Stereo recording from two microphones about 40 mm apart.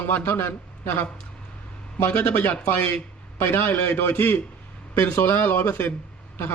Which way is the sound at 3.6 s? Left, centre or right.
Left.